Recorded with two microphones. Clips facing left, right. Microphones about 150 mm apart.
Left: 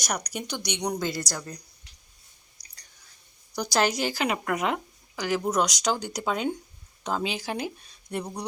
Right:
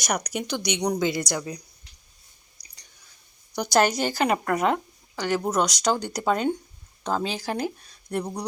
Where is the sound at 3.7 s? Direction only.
45° right (ahead or behind).